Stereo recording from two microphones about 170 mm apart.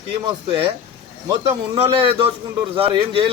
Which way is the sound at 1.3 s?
35° right (ahead or behind).